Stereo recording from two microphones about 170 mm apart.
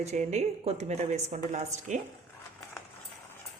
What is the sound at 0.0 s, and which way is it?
A woman's voice, 40° right (ahead or behind).